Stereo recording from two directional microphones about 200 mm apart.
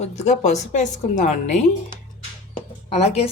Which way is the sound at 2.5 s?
35° left (ahead or behind).